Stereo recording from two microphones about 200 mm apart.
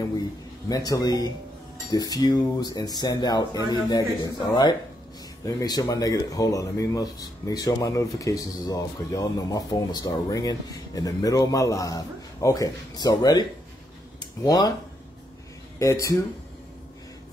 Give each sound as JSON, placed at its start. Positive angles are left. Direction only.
{"t": 0.7, "sound": "speech", "side_deg": 20}
{"t": 15.8, "sound": "speech", "side_deg": 15}